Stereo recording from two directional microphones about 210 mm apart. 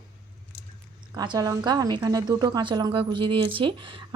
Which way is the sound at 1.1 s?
20° right (ahead or behind).